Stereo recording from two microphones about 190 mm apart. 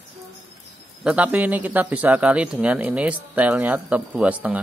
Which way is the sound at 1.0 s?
5° right (ahead or behind).